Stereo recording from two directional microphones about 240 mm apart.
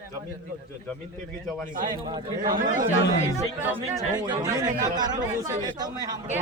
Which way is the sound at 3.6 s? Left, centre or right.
Centre.